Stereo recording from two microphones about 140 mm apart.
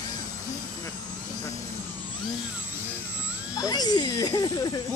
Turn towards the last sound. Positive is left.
turn(degrees=30)  # may be behind; listen again after turning